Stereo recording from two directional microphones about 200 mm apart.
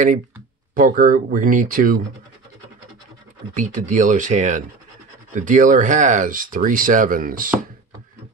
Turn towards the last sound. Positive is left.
turn(degrees=-45)  # may be behind; listen again after turning